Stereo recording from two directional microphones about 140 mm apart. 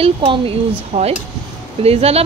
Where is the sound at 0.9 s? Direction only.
50° right (ahead or behind).